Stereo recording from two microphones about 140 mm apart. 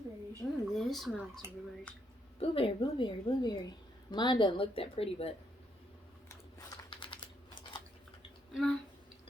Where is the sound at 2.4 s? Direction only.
40° left (ahead or behind).